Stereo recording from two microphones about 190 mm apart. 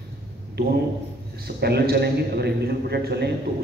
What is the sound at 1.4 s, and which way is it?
A man's voice, 60° right (ahead or behind).